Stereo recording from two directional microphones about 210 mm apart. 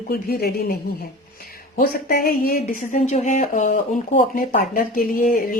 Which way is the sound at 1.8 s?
45° left (ahead or behind).